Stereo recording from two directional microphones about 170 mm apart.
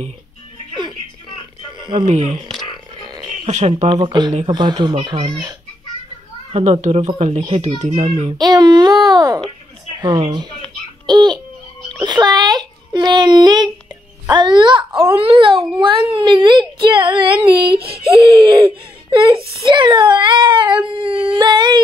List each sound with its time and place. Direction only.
2.0 s speech: 45° right (ahead or behind)
3.4 s a child's voice: 40° right (ahead or behind)
3.9 s a child's voice: 25° right (ahead or behind)
6.5 s a child's voice: 40° right (ahead or behind)
8.4 s a child's voice: 25° right (ahead or behind)
17.7 s speech: 65° right (ahead or behind)
18.4 s a child's voice: 20° right (ahead or behind)